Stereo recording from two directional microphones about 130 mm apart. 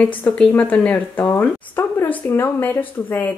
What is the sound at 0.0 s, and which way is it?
Speech, 10° left (ahead or behind).